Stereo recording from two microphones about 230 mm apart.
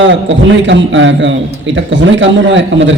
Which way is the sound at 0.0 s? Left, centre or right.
Right.